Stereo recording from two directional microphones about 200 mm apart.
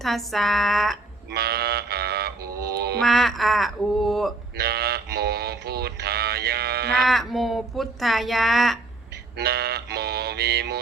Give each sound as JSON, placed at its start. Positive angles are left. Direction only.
{"t": 0.0, "sound": "speech", "side_deg": 0}
{"t": 1.3, "sound": "music", "side_deg": -50}
{"t": 3.0, "sound": "speech", "side_deg": 0}
{"t": 4.5, "sound": "a sound", "side_deg": -50}
{"t": 7.0, "sound": "speech", "side_deg": 0}
{"t": 9.4, "sound": "music", "side_deg": -50}